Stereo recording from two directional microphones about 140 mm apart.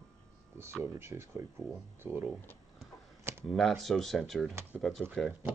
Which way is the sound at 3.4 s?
5° left (ahead or behind).